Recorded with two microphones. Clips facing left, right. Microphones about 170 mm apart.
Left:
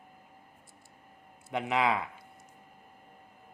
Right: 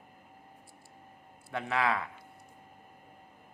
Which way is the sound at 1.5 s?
20° left (ahead or behind).